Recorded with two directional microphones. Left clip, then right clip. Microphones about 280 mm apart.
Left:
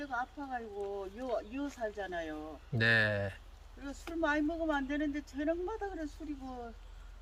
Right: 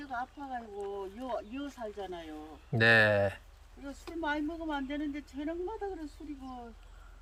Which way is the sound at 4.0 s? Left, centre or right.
Centre.